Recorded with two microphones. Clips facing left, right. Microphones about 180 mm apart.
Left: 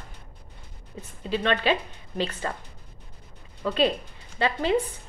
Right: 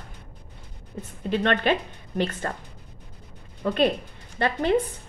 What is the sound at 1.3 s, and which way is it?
A woman's voice, 55° right (ahead or behind).